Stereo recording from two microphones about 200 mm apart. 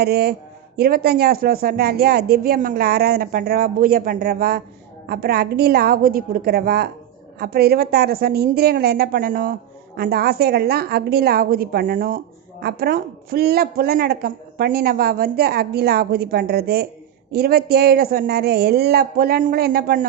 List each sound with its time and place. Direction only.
0.0 s a woman's voice: 50° right (ahead or behind)